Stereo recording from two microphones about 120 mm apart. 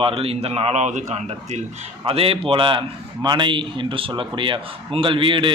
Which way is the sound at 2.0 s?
50° right (ahead or behind).